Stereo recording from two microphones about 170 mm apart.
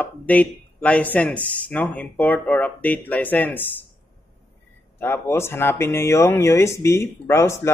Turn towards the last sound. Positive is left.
turn(degrees=15)  # may be behind; listen again after turning